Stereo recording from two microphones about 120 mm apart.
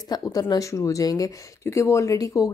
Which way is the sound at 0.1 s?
30° left (ahead or behind).